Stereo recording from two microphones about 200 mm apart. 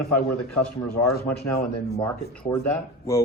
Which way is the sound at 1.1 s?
50° left (ahead or behind).